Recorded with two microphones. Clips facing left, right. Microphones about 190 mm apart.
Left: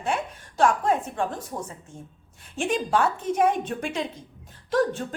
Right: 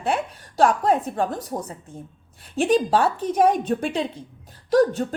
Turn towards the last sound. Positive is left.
turn(degrees=-40)  # may be behind; listen again after turning